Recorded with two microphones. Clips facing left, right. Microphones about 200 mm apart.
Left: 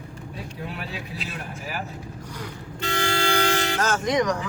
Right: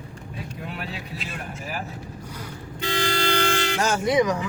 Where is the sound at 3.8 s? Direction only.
10° right (ahead or behind).